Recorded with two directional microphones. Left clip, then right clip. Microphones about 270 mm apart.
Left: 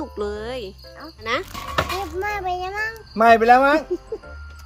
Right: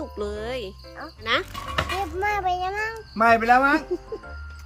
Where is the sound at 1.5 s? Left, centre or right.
Left.